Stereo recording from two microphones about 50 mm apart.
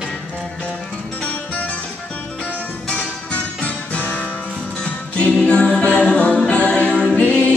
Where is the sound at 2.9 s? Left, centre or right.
Centre.